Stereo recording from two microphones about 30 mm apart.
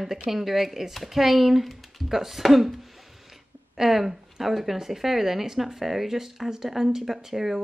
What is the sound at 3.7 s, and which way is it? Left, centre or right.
Speech, centre.